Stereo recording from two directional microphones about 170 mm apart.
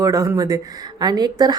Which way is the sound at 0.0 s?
20° right (ahead or behind).